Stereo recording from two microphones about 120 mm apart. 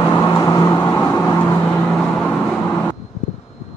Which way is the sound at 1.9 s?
5° left (ahead or behind).